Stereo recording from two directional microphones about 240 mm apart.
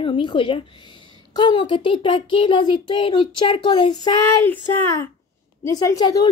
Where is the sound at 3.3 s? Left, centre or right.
Left.